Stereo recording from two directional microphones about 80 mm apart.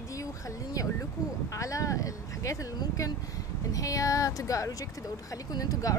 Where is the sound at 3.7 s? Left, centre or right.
Left.